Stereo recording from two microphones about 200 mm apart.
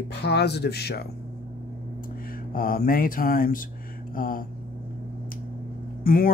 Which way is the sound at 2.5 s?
45° left (ahead or behind).